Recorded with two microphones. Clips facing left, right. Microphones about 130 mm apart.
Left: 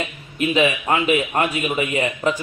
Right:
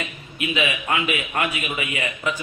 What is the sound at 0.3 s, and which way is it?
A man's voice, 35° left (ahead or behind).